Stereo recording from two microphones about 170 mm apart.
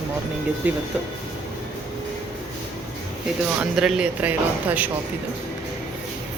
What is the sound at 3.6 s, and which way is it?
Speech, 5° right (ahead or behind).